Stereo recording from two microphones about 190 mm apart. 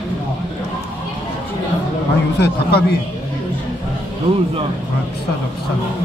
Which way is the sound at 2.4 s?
60° left (ahead or behind).